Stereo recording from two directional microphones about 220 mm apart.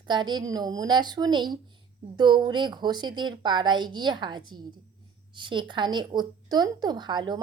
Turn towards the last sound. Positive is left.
turn(degrees=-20)  # may be behind; listen again after turning